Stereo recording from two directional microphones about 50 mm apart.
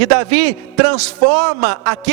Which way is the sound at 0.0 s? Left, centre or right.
Centre.